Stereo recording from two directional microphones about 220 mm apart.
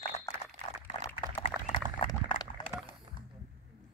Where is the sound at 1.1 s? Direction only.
25° left (ahead or behind).